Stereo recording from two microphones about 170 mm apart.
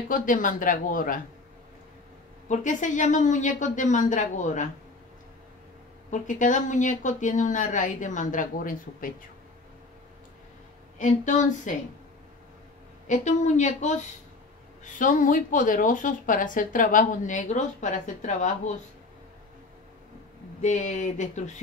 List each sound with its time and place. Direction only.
0.1 s a woman's voice: 50° left (ahead or behind)
2.4 s a woman's voice: 45° left (ahead or behind)
6.0 s a woman's voice: 45° left (ahead or behind)
11.0 s a woman's voice: 45° left (ahead or behind)
13.0 s a woman's voice: 45° left (ahead or behind)
20.6 s a woman's voice: 45° left (ahead or behind)